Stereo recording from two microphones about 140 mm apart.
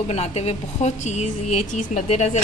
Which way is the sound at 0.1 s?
50° left (ahead or behind).